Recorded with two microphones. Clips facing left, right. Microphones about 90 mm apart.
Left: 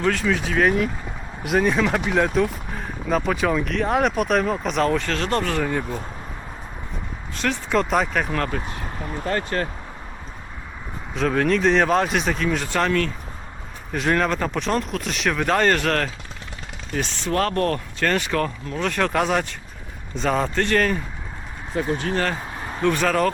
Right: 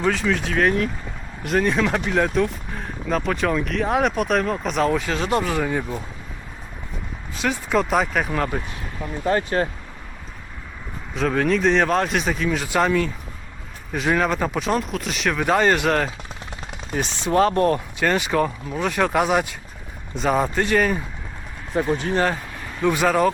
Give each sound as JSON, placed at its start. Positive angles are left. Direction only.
{"t": 0.0, "sound": "speech", "side_deg": 0}
{"t": 7.3, "sound": "speech", "side_deg": -5}
{"t": 11.1, "sound": "speech", "side_deg": 0}
{"t": 21.8, "sound": "speech", "side_deg": -20}